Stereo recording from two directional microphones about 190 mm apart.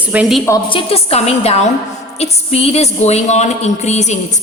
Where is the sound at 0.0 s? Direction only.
5° right (ahead or behind).